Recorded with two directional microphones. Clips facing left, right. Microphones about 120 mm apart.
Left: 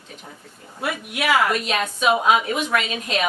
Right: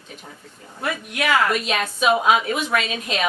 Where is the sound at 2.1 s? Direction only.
20° left (ahead or behind).